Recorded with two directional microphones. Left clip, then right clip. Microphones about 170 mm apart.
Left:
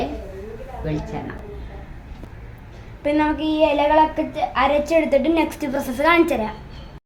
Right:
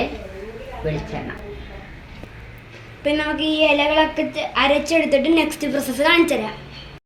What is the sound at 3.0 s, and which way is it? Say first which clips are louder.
A woman's voice: left 1 dB; 55° left (ahead or behind).